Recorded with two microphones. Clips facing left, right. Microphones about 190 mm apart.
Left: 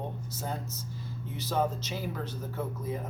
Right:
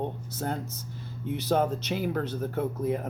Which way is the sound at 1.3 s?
65° right (ahead or behind).